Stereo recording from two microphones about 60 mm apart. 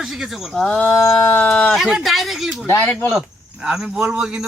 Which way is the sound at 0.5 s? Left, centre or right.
Centre.